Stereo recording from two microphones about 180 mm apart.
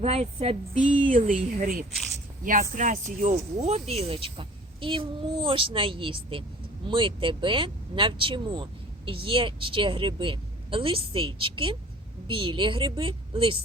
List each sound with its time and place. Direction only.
0.0 s speech: 35° right (ahead or behind)